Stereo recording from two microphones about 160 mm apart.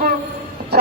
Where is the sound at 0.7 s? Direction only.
90° right.